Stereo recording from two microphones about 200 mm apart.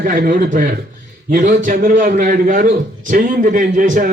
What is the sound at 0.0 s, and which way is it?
A man's voice, 45° right (ahead or behind).